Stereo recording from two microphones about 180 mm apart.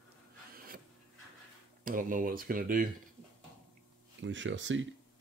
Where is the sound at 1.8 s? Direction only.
50° right (ahead or behind).